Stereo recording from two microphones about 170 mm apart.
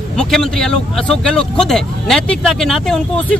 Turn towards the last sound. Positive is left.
turn(degrees=0)  # may be behind; listen again after turning